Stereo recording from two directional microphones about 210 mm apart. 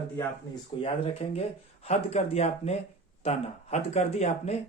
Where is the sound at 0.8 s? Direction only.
30° left (ahead or behind).